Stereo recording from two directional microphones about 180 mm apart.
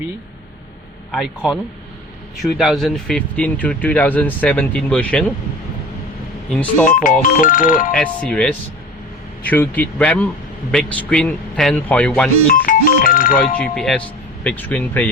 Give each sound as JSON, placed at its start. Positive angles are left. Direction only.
{"t": 1.1, "sound": "a man's voice", "side_deg": -5}
{"t": 6.5, "sound": "speech", "side_deg": 5}
{"t": 6.8, "sound": "speech", "side_deg": 50}
{"t": 7.9, "sound": "a man's voice", "side_deg": 5}
{"t": 12.5, "sound": "speech", "side_deg": 50}
{"t": 13.6, "sound": "a man's voice", "side_deg": 5}